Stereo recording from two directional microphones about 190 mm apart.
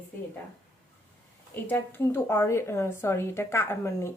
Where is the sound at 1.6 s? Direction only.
10° left (ahead or behind).